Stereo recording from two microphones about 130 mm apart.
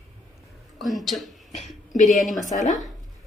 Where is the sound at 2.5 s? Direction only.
70° left (ahead or behind).